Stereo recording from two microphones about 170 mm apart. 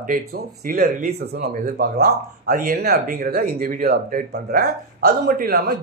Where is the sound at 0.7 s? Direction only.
60° right (ahead or behind).